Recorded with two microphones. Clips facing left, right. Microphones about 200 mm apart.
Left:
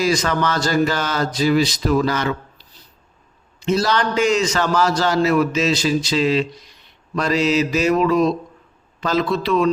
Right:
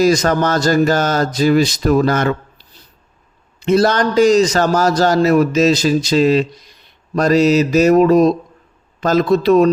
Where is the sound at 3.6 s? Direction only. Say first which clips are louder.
Right 5 dB; 55° right (ahead or behind).